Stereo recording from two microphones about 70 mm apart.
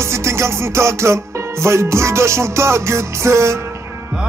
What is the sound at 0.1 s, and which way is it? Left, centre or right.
Music, right.